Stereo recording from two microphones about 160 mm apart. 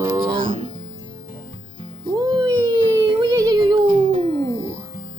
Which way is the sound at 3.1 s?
25° right (ahead or behind).